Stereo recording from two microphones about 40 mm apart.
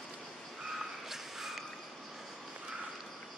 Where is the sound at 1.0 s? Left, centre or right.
Centre.